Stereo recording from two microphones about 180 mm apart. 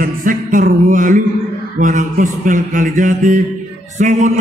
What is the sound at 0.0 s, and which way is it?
Music, 50° right (ahead or behind).